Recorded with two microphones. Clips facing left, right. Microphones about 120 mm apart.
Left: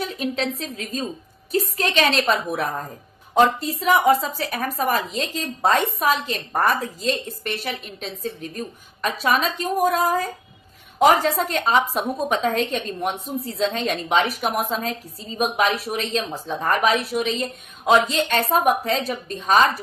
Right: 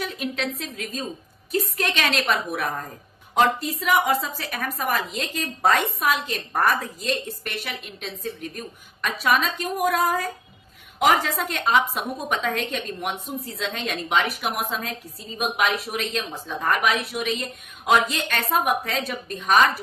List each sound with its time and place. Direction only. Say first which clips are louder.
0.2 s a woman's voice: left 3 dB; 30° left (ahead or behind)